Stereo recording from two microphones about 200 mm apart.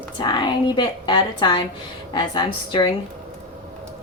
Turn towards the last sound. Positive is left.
turn(degrees=25)  # may be behind; listen again after turning